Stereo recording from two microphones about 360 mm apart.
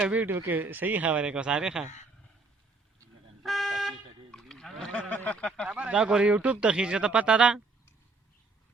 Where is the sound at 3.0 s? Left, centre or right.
Centre.